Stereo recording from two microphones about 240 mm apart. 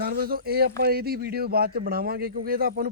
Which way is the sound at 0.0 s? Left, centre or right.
Right.